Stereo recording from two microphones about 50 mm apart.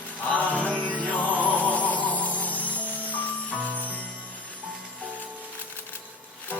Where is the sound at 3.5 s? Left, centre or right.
Right.